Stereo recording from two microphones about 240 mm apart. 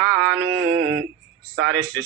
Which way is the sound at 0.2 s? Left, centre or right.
Right.